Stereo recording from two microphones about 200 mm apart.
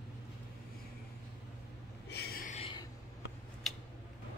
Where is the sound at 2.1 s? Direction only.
50° left (ahead or behind).